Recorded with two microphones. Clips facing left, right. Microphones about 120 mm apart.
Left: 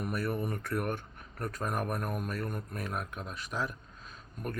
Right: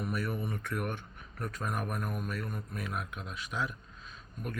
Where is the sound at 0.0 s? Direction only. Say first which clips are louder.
Left 2 dB; 45° left (ahead or behind).